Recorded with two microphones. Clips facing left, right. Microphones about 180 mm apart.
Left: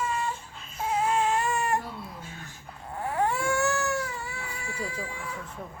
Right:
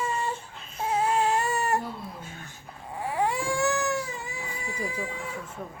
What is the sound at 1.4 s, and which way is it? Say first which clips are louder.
Baby cry: right 1 dB; 35° right (ahead or behind).